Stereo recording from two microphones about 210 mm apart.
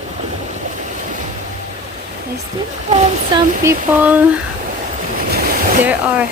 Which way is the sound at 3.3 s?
15° right (ahead or behind).